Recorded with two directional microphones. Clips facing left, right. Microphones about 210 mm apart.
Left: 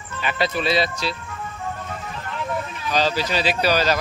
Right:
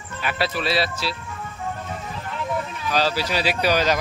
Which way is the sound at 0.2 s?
5° right (ahead or behind).